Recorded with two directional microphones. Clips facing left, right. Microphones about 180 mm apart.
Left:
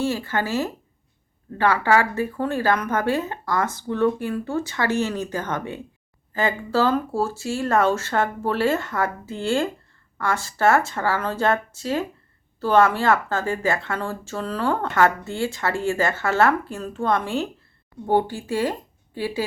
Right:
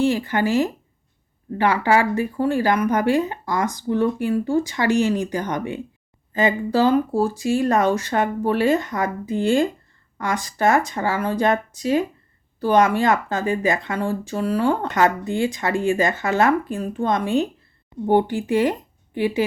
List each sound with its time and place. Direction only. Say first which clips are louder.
0.0 s a woman's voice: right 5 dB; 15° right (ahead or behind)